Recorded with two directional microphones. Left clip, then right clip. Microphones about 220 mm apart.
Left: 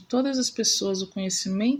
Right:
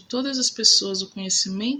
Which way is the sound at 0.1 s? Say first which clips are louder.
Right 1 dB; 20° left (ahead or behind).